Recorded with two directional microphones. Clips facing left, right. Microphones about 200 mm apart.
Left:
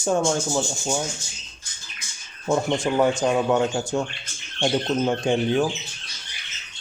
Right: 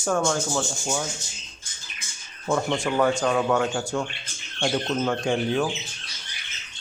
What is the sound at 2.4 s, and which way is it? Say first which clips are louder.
A man's voice: left 2 dB; 25° left (ahead or behind).